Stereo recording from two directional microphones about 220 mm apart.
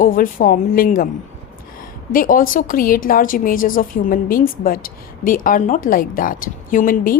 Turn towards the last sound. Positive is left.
turn(degrees=40)  # may be behind; listen again after turning